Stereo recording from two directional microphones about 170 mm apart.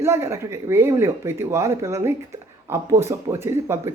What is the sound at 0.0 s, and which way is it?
Speech, 15° right (ahead or behind).